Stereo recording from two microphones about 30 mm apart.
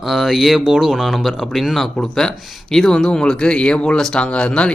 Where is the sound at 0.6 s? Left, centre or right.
Right.